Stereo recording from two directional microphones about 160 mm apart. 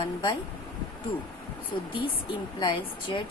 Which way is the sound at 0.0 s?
30° left (ahead or behind).